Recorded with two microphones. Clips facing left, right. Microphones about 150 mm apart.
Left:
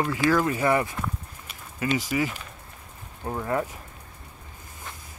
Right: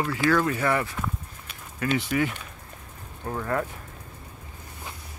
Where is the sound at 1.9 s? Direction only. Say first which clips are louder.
Right 1 dB; 5° left (ahead or behind).